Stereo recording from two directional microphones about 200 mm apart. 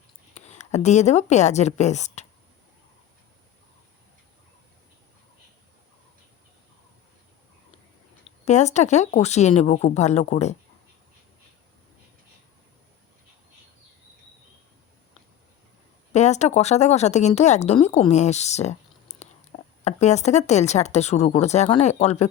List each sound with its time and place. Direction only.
0.3 s speech: 35° left (ahead or behind)
8.4 s speech: 35° left (ahead or behind)
16.1 s speech: 35° left (ahead or behind)